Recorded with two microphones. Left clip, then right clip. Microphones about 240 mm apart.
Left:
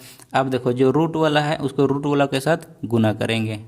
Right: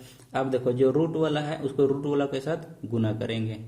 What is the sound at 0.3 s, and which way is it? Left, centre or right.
Speech, left.